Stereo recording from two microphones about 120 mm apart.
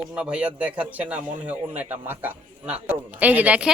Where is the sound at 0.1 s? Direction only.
10° right (ahead or behind).